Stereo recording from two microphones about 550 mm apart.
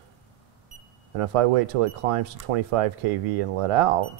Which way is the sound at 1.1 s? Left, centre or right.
Right.